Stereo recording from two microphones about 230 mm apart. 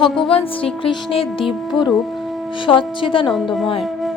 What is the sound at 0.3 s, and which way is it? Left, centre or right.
A woman's voice, left.